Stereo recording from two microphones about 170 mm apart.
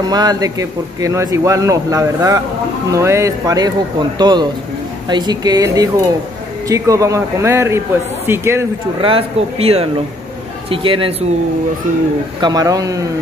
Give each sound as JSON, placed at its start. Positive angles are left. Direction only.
{"t": 0.0, "sound": "a man's voice", "side_deg": -25}
{"t": 9.0, "sound": "speech", "side_deg": -35}
{"t": 12.4, "sound": "a man's voice", "side_deg": -25}